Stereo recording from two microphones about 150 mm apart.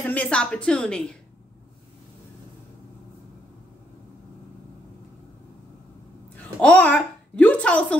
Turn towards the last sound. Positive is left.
turn(degrees=10)  # may be behind; listen again after turning